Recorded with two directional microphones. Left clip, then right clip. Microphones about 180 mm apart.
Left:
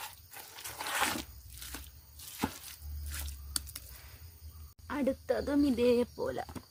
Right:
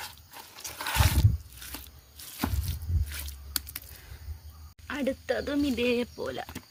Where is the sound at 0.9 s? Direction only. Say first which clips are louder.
Right 2 dB; 30° right (ahead or behind).